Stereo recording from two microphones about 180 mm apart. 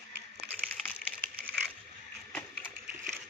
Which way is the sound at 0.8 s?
Centre (ahead or behind).